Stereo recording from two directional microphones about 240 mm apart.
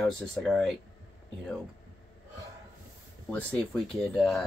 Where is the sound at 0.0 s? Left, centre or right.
Centre.